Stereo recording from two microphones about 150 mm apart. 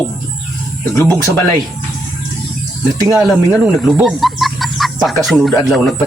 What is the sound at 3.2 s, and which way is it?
Speech, 5° right (ahead or behind).